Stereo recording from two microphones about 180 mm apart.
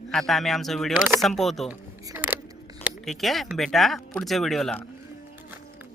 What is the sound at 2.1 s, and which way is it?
Scissors, 10° right (ahead or behind).